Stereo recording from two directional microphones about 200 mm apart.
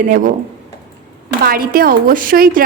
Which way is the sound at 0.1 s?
40° right (ahead or behind).